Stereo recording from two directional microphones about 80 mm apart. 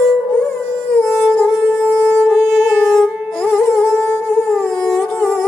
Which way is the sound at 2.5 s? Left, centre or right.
Centre.